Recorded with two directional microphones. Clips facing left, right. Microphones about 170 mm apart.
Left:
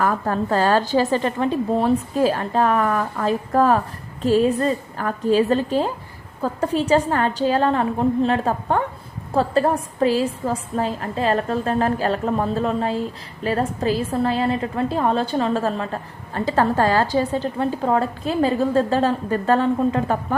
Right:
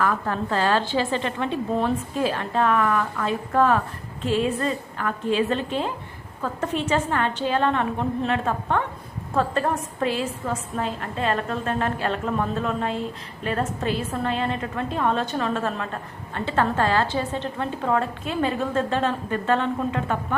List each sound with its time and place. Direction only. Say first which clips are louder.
0.0 s a woman's voice: left 3 dB; 40° left (ahead or behind)